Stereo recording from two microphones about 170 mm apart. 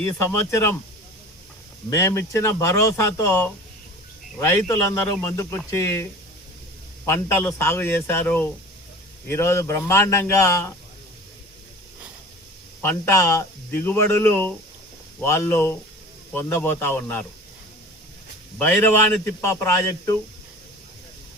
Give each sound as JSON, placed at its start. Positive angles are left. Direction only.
{"t": 0.0, "sound": "speech", "side_deg": 15}
{"t": 1.9, "sound": "speech", "side_deg": 15}
{"t": 12.8, "sound": "speech", "side_deg": 15}
{"t": 19.2, "sound": "speech", "side_deg": 15}